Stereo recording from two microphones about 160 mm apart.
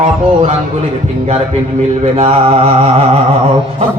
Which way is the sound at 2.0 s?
40° right (ahead or behind).